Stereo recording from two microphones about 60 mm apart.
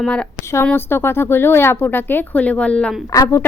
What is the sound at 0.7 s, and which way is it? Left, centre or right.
Speech, left.